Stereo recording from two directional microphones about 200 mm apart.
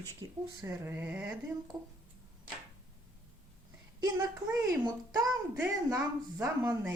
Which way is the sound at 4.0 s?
20° right (ahead or behind).